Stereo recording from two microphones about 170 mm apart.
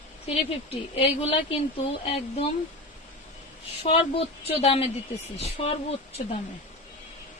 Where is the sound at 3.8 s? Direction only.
35° left (ahead or behind).